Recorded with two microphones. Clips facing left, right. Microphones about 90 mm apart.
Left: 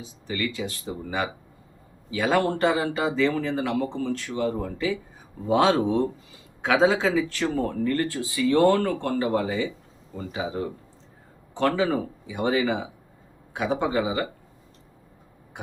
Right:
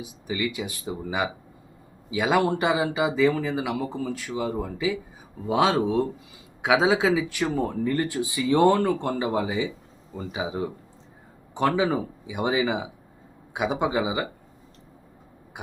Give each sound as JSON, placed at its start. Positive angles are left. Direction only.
{"t": 0.0, "sound": "speech", "side_deg": -15}
{"t": 15.6, "sound": "speech", "side_deg": -10}